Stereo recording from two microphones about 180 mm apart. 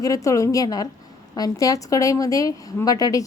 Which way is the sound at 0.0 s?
20° left (ahead or behind).